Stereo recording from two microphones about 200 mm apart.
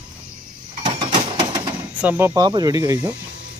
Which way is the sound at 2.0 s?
10° right (ahead or behind).